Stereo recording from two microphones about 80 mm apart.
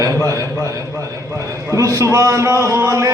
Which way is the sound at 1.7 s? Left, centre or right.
Right.